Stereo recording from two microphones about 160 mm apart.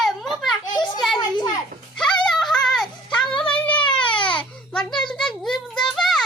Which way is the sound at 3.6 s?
10° left (ahead or behind).